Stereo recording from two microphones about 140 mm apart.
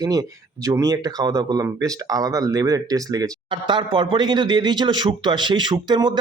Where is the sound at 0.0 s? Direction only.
25° right (ahead or behind).